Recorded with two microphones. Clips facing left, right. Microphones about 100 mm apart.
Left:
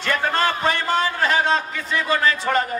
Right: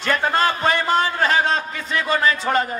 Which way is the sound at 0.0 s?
15° right (ahead or behind).